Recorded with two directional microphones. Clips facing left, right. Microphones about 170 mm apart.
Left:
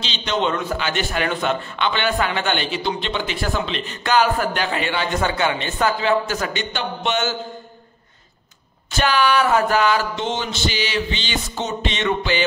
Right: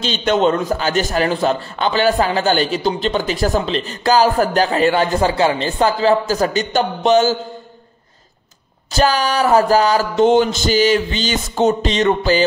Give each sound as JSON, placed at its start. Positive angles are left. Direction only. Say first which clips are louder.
{"t": 0.0, "sound": "a man's voice", "louder": "right 7 dB", "side_deg": -50}
{"t": 8.9, "sound": "a man's voice", "louder": "right 2 dB", "side_deg": -40}